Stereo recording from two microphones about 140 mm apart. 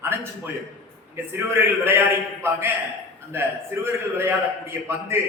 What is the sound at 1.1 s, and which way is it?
A man's voice, 15° right (ahead or behind).